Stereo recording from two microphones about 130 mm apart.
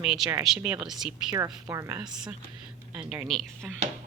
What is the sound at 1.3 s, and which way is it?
Speech, 25° right (ahead or behind).